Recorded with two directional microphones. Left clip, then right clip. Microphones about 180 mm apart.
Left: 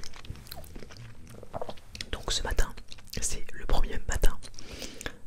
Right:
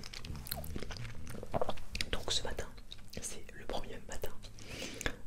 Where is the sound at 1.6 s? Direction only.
10° right (ahead or behind).